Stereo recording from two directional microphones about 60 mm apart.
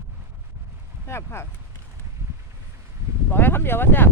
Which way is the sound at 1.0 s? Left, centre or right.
Left.